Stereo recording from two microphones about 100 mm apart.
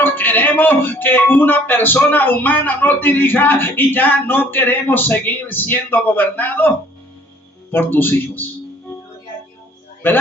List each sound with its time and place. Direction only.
0.0 s speech: 20° left (ahead or behind)
10.0 s speech: 20° left (ahead or behind)